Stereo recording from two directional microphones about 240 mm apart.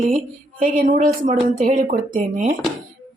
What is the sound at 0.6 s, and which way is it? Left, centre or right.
Speech, right.